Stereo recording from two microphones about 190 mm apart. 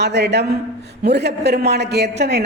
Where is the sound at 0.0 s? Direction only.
65° right (ahead or behind).